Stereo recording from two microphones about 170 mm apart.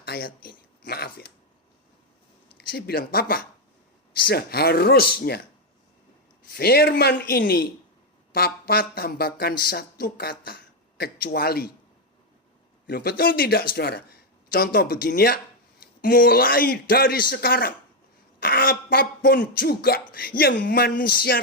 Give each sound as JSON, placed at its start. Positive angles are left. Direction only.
{"t": 0.0, "sound": "speech", "side_deg": 60}
{"t": 2.6, "sound": "speech", "side_deg": 65}
{"t": 6.5, "sound": "speech", "side_deg": 65}
{"t": 12.9, "sound": "speech", "side_deg": 65}